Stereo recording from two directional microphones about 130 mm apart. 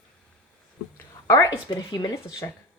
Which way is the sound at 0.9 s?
20° left (ahead or behind).